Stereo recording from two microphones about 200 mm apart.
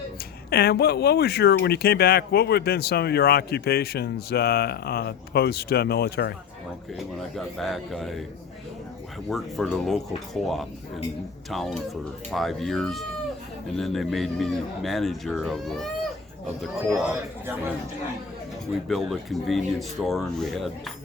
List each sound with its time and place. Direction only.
0.5 s speech: 50° left (ahead or behind)
7.2 s speech: centre (ahead or behind)
9.3 s speech: centre (ahead or behind)
16.9 s a man's voice: 10° right (ahead or behind)
18.9 s speech: centre (ahead or behind)